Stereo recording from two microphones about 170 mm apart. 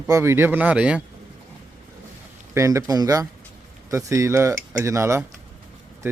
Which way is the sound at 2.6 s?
20° right (ahead or behind).